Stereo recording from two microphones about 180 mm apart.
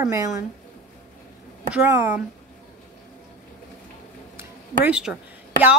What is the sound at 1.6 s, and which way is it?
Speech, 10° right (ahead or behind).